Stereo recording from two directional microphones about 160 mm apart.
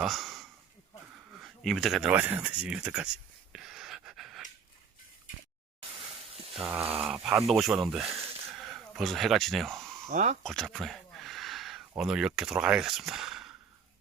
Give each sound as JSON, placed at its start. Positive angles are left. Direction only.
{"t": 0.0, "sound": "speech", "side_deg": 0}
{"t": 3.5, "sound": "wheeze", "side_deg": -5}
{"t": 5.9, "sound": "a sound", "side_deg": -35}
{"t": 6.6, "sound": "speech", "side_deg": -10}
{"t": 8.5, "sound": "a sound", "side_deg": 0}
{"t": 10.1, "sound": "speech", "side_deg": -50}
{"t": 10.4, "sound": "speech", "side_deg": 5}